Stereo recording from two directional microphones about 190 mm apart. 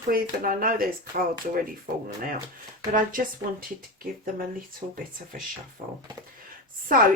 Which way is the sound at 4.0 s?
50° right (ahead or behind).